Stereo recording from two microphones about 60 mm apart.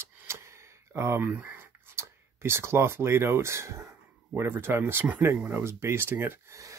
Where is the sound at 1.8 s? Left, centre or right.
Right.